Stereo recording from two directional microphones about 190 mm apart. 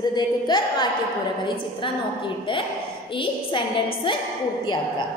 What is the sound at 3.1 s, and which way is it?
Speech, 25° left (ahead or behind).